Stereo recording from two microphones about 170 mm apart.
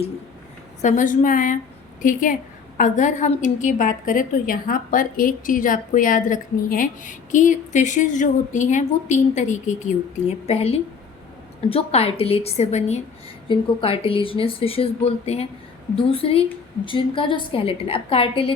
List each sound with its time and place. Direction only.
0.8 s a woman's voice: 45° left (ahead or behind)